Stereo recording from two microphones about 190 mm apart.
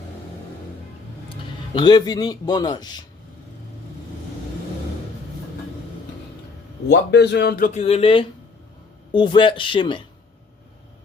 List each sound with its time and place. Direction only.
1.7 s speech: 20° left (ahead or behind)
6.8 s speech: 65° left (ahead or behind); by 7.8 s 50° left (ahead or behind)
7.8 s speech: 30° left (ahead or behind)